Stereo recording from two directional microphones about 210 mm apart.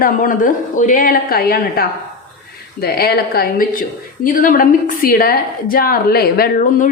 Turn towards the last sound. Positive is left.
turn(degrees=45)  # may be behind; listen again after turning